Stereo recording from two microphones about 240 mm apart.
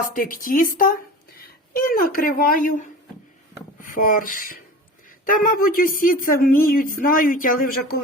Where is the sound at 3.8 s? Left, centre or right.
Left.